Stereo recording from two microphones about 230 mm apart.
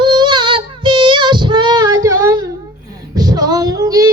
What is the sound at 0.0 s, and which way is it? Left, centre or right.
Child singing, centre.